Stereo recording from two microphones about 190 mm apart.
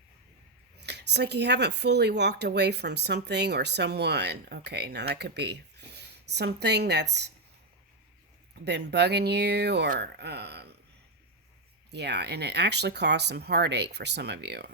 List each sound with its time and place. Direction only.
0.8 s speech: 60° right (ahead or behind)
8.6 s speech: 60° right (ahead or behind)
11.9 s speech: 60° right (ahead or behind)